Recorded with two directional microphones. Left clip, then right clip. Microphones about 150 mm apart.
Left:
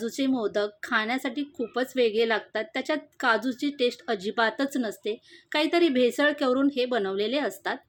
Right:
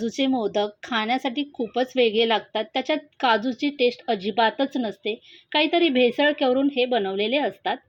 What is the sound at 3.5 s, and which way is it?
Speech, 40° left (ahead or behind).